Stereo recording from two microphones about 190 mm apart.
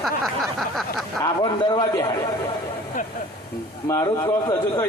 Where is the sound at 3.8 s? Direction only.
20° left (ahead or behind).